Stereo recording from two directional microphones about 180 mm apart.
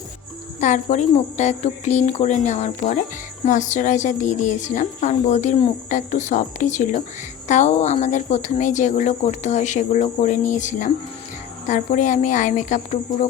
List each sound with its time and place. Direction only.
0.6 s speech: 40° left (ahead or behind)